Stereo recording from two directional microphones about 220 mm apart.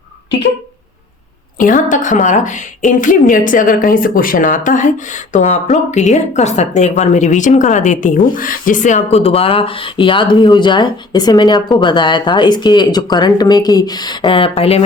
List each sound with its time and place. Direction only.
1.5 s a woman's voice: 35° left (ahead or behind)